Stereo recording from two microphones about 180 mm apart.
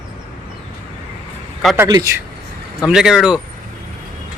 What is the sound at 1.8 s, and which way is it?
Speech, 20° right (ahead or behind).